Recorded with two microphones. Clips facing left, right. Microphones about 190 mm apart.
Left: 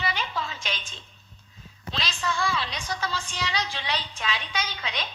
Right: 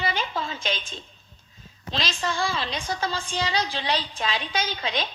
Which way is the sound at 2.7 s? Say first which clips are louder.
Right 3 dB; 55° right (ahead or behind).